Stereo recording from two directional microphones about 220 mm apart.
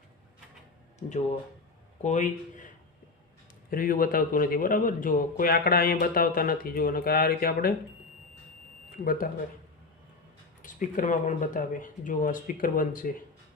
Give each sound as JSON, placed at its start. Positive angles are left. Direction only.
{"t": 1.0, "sound": "a man's voice", "side_deg": 35}
{"t": 9.0, "sound": "a man's voice", "side_deg": 40}
{"t": 10.6, "sound": "a man's voice", "side_deg": 35}